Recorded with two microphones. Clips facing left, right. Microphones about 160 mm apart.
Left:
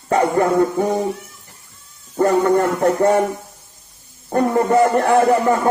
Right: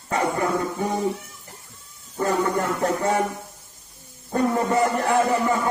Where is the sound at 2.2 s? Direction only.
65° left (ahead or behind).